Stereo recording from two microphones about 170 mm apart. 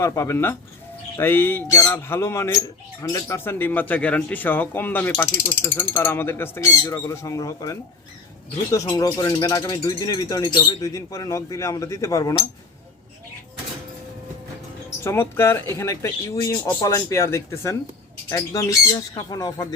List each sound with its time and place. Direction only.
0.0 s speech: 15° left (ahead or behind)
15.0 s speech: 15° left (ahead or behind)